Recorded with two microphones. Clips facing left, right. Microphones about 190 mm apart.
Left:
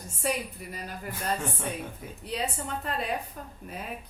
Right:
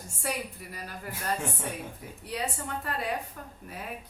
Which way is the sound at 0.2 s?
20° left (ahead or behind).